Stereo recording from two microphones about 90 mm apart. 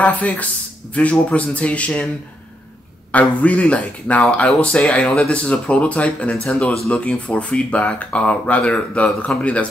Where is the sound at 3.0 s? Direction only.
15° left (ahead or behind).